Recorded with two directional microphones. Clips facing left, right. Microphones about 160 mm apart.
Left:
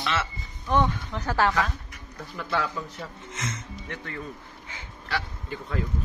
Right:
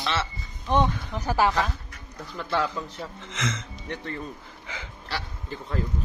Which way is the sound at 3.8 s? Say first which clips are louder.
Right 3 dB; 30° right (ahead or behind).